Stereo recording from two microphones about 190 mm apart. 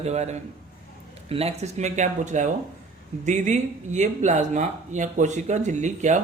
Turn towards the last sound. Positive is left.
turn(degrees=-40)  # may be behind; listen again after turning